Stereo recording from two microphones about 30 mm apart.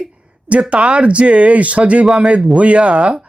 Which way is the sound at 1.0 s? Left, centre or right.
Right.